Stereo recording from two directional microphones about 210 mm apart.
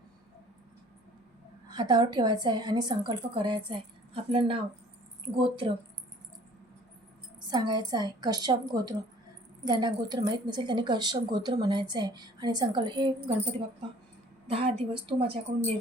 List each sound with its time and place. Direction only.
1.7 s a woman's voice: 20° right (ahead or behind)
7.5 s speech: 20° right (ahead or behind)
14.5 s speech: 25° right (ahead or behind)